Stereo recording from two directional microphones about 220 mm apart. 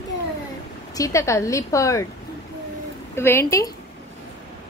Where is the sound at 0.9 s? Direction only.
15° left (ahead or behind).